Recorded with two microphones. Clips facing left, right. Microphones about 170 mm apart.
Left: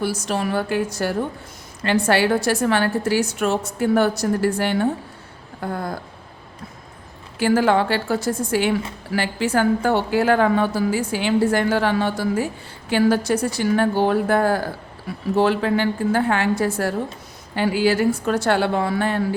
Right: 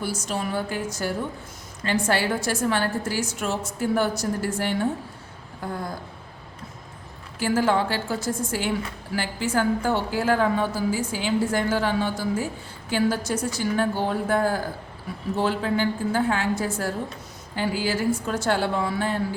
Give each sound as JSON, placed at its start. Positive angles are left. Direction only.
{"t": 0.0, "sound": "a woman's voice", "side_deg": 70}
{"t": 7.3, "sound": "a woman's voice", "side_deg": 65}